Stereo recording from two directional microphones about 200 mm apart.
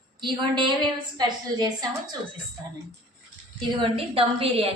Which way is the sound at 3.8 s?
30° right (ahead or behind).